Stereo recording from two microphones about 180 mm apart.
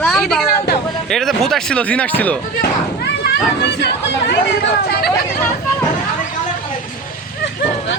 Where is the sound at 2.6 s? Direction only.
65° left (ahead or behind).